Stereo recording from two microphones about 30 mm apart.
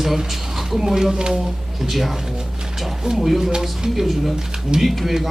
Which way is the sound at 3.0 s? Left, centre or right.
Centre.